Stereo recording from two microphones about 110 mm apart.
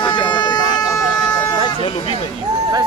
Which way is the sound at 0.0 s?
45° left (ahead or behind).